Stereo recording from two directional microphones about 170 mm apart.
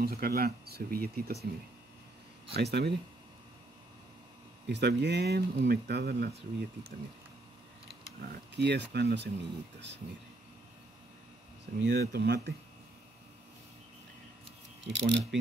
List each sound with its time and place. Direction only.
0.0 s speech: 65° right (ahead or behind)
2.5 s speech: 75° right (ahead or behind)
4.6 s speech: 85° right; by 6.3 s 65° right (ahead or behind)
8.2 s speech: 70° right (ahead or behind); by 9.9 s 90° right
11.8 s speech: 70° right (ahead or behind)
14.8 s speech: 90° right